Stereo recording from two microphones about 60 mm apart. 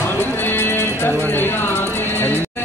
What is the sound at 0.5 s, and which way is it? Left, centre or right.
Music, left.